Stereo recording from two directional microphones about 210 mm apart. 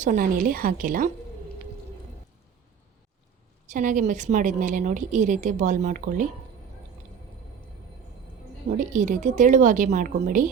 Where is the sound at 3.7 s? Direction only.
40° right (ahead or behind).